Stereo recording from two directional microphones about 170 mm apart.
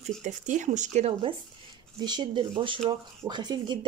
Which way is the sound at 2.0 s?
25° right (ahead or behind).